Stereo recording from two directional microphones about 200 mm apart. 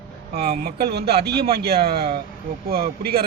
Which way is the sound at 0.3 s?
55° right (ahead or behind).